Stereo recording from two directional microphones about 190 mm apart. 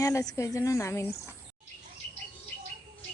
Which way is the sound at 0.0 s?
15° left (ahead or behind).